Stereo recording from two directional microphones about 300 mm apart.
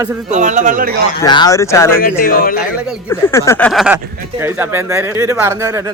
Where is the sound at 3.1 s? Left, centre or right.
Centre.